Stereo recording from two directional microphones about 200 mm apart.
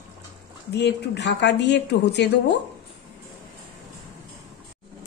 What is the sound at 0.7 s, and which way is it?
Speech, 60° left (ahead or behind).